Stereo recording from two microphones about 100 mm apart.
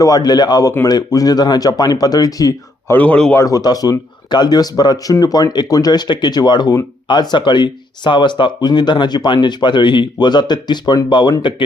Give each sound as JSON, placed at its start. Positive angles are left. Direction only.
{"t": 0.0, "sound": "speech", "side_deg": 40}
{"t": 2.8, "sound": "speech", "side_deg": 15}
{"t": 3.3, "sound": "speech", "side_deg": 35}